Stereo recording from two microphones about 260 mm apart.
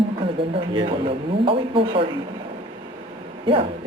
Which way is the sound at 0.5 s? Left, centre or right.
Centre.